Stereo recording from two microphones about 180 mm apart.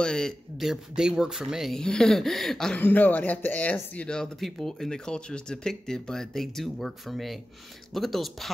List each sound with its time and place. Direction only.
0.0 s speech: 5° left (ahead or behind)